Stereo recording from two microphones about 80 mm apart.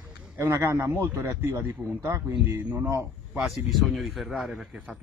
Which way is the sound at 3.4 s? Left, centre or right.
Centre.